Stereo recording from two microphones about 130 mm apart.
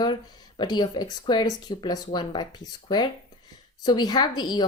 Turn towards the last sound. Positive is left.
turn(degrees=30)  # may be behind; listen again after turning